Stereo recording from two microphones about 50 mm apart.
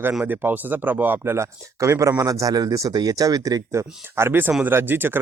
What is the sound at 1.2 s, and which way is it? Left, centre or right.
Speech, right.